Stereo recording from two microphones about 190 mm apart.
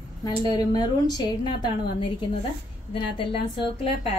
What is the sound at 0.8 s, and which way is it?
Speech, 20° left (ahead or behind).